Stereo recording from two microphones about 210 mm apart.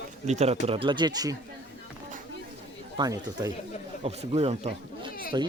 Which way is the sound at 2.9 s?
15° right (ahead or behind).